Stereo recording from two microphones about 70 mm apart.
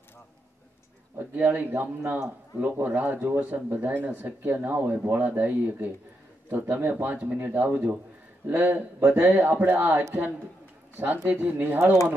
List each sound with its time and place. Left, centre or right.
1.3 s speech: right